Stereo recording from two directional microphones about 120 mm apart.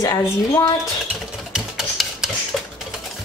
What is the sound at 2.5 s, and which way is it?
Typing, centre (ahead or behind).